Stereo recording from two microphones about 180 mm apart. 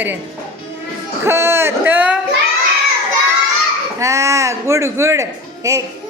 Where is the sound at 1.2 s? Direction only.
15° right (ahead or behind).